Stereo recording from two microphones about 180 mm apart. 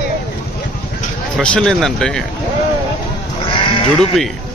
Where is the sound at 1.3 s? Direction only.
5° left (ahead or behind).